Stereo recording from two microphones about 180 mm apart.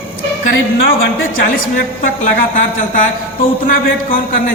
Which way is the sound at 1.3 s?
50° left (ahead or behind).